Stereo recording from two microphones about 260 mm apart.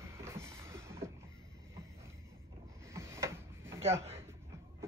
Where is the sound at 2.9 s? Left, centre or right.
Centre.